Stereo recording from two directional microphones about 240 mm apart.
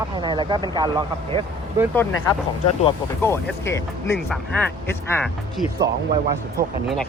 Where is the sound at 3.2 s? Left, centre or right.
Centre.